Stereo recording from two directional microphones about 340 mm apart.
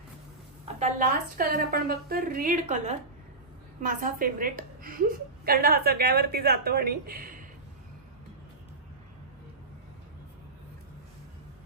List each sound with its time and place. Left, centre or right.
0.7 s a woman's voice: right